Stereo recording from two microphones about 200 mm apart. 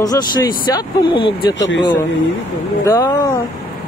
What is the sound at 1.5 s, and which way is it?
Speech, 65° left (ahead or behind).